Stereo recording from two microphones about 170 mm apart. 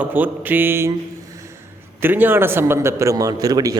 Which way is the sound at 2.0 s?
10° right (ahead or behind).